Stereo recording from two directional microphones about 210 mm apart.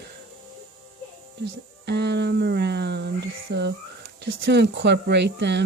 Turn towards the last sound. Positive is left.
turn(degrees=-55)  # may be behind; listen again after turning